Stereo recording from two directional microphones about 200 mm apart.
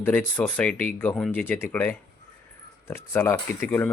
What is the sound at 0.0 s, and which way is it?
Speech, 10° left (ahead or behind).